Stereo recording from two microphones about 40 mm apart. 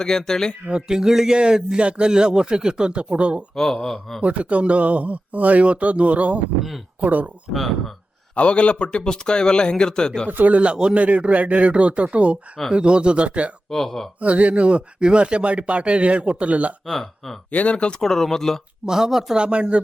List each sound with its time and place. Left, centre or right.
0.0 s speech: centre
0.7 s speech: centre
3.5 s speech: centre
4.2 s speech: right
8.4 s a man's voice: left
10.2 s speech: right
10.6 s speech: right
13.7 s speech: centre
14.2 s speech: right
16.8 s speech: centre
17.5 s speech: left
18.0 s speech: centre
18.9 s speech: centre
19.4 s speech: right